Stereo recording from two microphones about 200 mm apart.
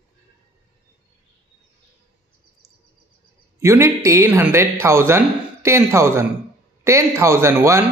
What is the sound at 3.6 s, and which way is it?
Speech, 15° right (ahead or behind).